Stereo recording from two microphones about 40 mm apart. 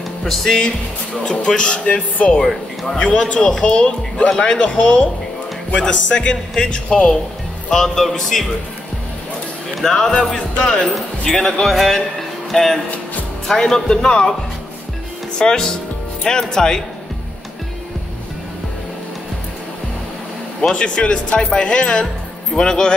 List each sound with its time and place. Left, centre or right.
0.2 s speech: centre; by 2.0 s left
2.4 s speech: centre
3.0 s speech: left
3.3 s speech: centre
7.7 s speech: centre
9.8 s speech: centre
11.2 s speech: centre
15.3 s speech: centre
20.7 s speech: left